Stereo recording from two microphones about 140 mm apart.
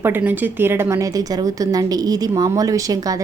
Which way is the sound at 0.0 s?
15° right (ahead or behind).